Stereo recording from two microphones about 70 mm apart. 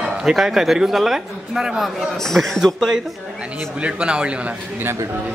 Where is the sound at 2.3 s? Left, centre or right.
Centre.